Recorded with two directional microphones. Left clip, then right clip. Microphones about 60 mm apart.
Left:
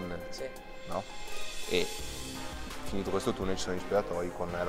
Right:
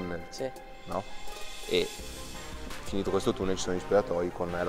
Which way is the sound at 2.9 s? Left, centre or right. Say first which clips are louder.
Right 3 dB; centre.